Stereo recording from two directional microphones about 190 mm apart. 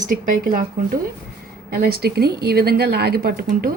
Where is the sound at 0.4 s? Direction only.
50° right (ahead or behind).